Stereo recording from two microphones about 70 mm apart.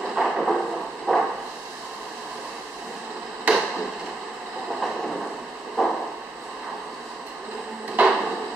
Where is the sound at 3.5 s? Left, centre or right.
Right.